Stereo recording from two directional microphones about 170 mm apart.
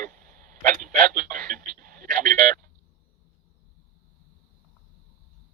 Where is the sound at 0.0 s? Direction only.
50° right (ahead or behind).